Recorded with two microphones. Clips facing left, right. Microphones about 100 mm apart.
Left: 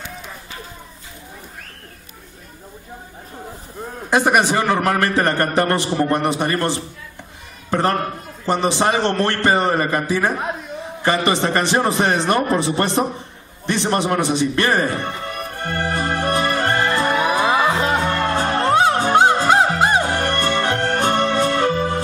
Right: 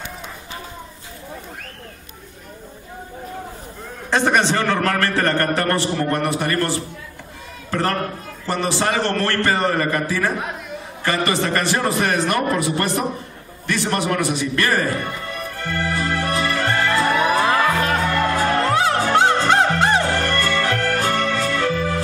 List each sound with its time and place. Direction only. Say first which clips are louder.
4.1 s a man's voice: left 2 dB; 10° left (ahead or behind)
13.7 s music: left 2 dB; 25° left (ahead or behind)